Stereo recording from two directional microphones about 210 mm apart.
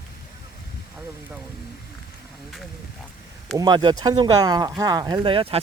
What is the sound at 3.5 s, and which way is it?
Speech, 20° right (ahead or behind).